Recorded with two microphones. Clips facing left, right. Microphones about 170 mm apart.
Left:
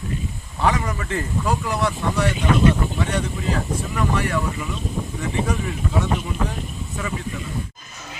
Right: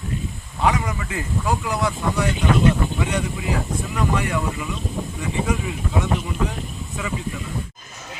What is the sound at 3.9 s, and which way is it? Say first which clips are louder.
Speech: even; 20° right (ahead or behind).